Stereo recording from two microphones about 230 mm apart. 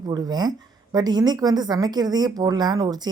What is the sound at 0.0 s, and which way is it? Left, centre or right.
A woman's voice, centre.